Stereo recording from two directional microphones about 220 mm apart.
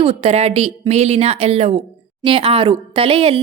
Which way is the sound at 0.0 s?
25° right (ahead or behind).